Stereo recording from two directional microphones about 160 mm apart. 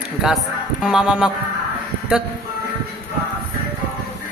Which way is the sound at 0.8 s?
5° right (ahead or behind).